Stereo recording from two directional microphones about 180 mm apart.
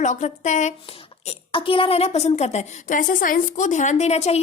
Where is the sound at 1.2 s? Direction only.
30° left (ahead or behind).